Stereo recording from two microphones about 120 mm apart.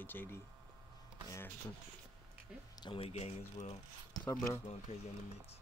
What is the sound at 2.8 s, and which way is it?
Speech, 50° left (ahead or behind).